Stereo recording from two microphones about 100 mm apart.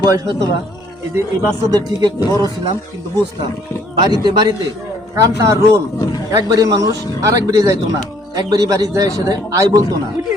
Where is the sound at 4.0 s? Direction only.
45° right (ahead or behind).